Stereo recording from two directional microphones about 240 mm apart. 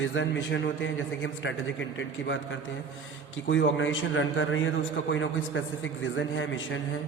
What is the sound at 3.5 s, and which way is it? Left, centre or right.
A man's voice, left.